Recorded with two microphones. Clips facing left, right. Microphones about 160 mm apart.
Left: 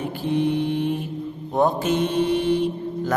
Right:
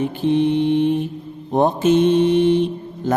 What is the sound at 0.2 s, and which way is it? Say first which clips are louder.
Mantra: right 4 dB; 20° right (ahead or behind).